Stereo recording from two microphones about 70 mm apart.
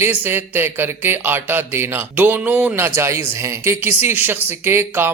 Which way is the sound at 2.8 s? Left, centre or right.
Right.